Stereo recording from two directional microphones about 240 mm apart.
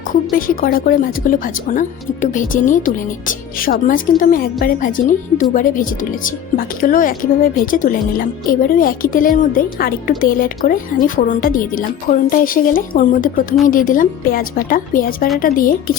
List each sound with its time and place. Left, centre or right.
0.1 s speech: left